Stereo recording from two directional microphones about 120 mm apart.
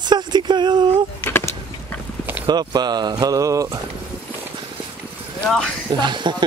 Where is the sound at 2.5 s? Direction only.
35° right (ahead or behind).